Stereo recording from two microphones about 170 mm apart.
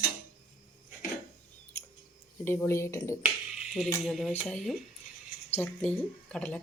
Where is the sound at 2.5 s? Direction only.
15° left (ahead or behind).